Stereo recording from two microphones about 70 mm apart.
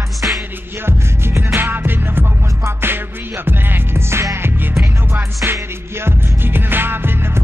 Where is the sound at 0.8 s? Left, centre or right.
Right.